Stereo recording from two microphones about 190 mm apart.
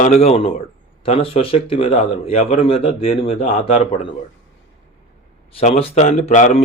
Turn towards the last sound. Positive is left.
turn(degrees=40)  # may be behind; listen again after turning